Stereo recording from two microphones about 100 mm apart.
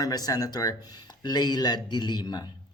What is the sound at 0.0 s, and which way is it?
Speech, 40° left (ahead or behind).